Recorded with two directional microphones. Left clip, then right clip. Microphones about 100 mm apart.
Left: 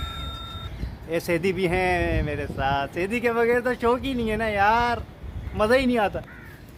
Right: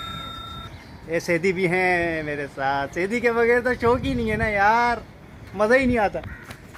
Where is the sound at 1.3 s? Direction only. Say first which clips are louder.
Right 2 dB; 15° right (ahead or behind).